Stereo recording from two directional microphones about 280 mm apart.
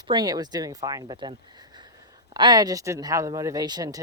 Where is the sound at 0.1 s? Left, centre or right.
Centre.